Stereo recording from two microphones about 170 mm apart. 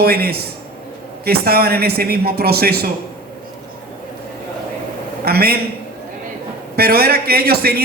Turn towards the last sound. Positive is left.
turn(degrees=-65)  # may be behind; listen again after turning